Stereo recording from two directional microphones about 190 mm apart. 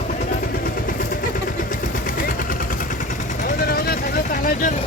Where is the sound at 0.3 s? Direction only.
50° left (ahead or behind).